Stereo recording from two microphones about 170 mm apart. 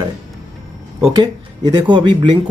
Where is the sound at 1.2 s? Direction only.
25° right (ahead or behind).